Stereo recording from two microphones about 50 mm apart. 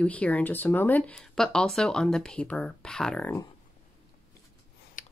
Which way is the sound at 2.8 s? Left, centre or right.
Centre.